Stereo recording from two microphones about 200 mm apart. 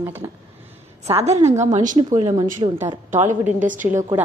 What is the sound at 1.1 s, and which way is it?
A woman's voice, 35° right (ahead or behind).